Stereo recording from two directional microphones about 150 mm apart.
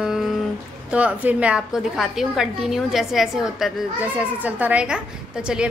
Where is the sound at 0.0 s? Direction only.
Centre (ahead or behind).